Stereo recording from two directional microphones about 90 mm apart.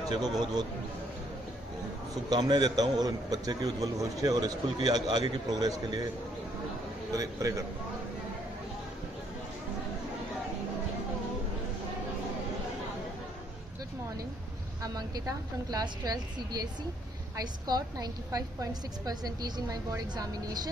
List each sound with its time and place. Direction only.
0.1 s a man's voice: 50° right (ahead or behind)
2.2 s a man's voice: 50° right (ahead or behind)
7.1 s a man's voice: 40° right (ahead or behind)
14.8 s a man's voice: 45° right (ahead or behind)